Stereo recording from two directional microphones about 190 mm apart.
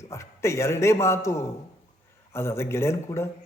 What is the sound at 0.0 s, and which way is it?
Speech, 15° left (ahead or behind).